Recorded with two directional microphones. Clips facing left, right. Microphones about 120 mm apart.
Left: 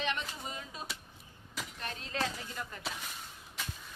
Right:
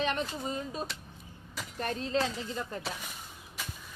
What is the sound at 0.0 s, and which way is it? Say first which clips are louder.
Speech: right 5 dB; 40° right (ahead or behind).